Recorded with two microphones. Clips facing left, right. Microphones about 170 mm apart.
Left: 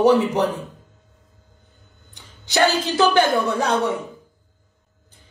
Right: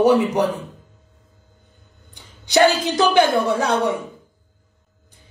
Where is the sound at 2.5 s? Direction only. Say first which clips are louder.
Right 3 dB; 15° right (ahead or behind).